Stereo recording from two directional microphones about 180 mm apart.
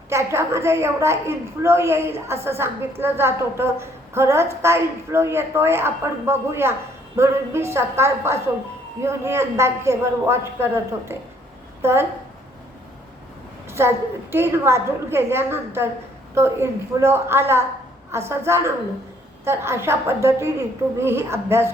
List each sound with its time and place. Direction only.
0.1 s a woman's voice: 15° right (ahead or behind)
11.8 s a woman's voice: 15° right (ahead or behind)
13.7 s a woman's voice: 15° right (ahead or behind)